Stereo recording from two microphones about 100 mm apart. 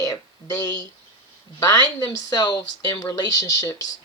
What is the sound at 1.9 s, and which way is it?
Speech, 40° left (ahead or behind).